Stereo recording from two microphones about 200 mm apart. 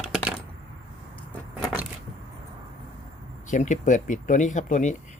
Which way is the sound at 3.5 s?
40° left (ahead or behind).